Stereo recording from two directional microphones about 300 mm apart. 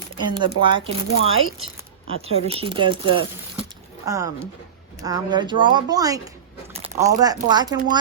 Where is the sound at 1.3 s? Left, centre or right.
Right.